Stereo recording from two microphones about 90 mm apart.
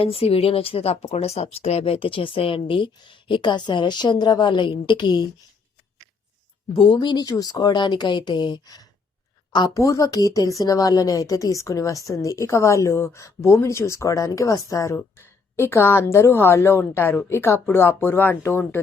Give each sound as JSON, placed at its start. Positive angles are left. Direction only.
{"t": 0.0, "sound": "speech", "side_deg": 90}
{"t": 6.7, "sound": "a woman's voice", "side_deg": 70}
{"t": 9.7, "sound": "a woman's voice", "side_deg": 40}